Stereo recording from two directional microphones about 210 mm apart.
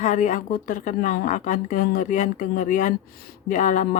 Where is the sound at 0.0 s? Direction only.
35° left (ahead or behind).